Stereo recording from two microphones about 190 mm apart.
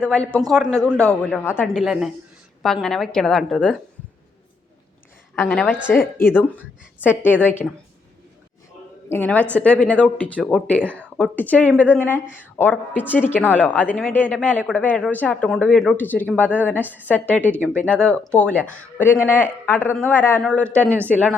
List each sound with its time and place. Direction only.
0.0 s a woman's voice: 5° left (ahead or behind)
5.3 s a woman's voice: 5° left (ahead or behind)
9.0 s speech: 10° left (ahead or behind)